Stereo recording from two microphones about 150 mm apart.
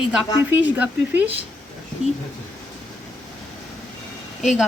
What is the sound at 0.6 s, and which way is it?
Speech, 10° right (ahead or behind).